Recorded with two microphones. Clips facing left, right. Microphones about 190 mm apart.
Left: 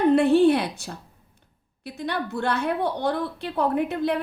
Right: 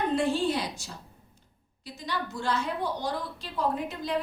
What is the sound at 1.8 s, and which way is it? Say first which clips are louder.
A woman's voice: left 6 dB; 60° left (ahead or behind).